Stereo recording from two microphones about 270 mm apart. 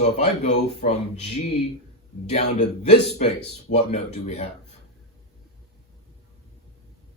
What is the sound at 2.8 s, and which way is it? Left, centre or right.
A man's voice, left.